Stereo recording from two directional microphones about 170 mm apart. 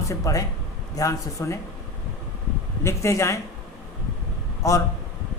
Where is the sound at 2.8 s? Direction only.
15° left (ahead or behind).